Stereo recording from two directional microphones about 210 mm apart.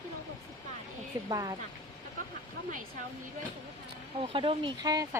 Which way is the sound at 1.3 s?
15° right (ahead or behind).